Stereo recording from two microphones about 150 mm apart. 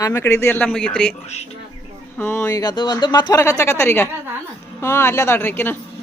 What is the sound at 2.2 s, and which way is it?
Speech, 15° left (ahead or behind).